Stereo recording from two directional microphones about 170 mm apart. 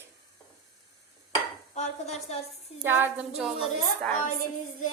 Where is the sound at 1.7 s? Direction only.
40° left (ahead or behind).